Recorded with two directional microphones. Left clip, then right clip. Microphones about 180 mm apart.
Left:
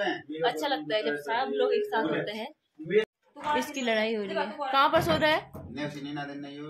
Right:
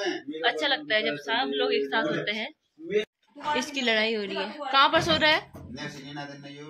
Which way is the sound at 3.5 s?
5° left (ahead or behind).